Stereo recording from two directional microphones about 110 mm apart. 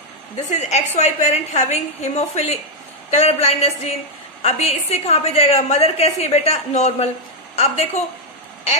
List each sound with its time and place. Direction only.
0.5 s a woman's voice: 90° left
7.5 s a woman's voice: 85° left